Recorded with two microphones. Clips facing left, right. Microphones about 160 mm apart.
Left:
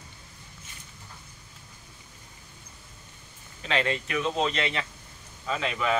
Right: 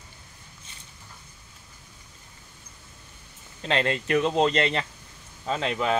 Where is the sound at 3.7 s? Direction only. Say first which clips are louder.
Right 4 dB; 40° right (ahead or behind).